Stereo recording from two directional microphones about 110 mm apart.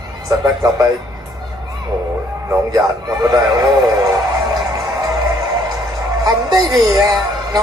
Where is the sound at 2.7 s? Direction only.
35° right (ahead or behind).